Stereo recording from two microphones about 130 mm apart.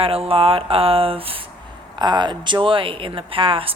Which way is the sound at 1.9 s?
35° right (ahead or behind).